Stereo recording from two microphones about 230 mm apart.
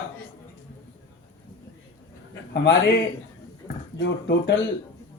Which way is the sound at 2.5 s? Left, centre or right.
Left.